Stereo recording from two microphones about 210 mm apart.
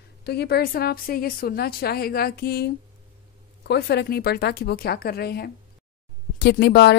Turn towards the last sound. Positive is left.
turn(degrees=55)  # may be behind; listen again after turning